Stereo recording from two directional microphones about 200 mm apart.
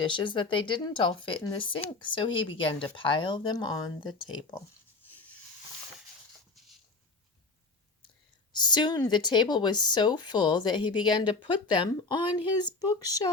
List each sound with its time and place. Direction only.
0.0 s speech: 25° left (ahead or behind)
8.5 s speech: 20° left (ahead or behind)